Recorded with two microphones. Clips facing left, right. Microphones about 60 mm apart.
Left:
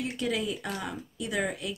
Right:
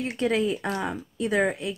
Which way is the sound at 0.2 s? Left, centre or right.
Right.